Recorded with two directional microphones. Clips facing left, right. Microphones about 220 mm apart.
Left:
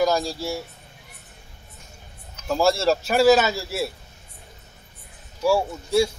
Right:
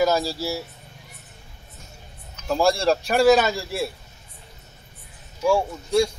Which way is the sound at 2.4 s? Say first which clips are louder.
Even; centre (ahead or behind).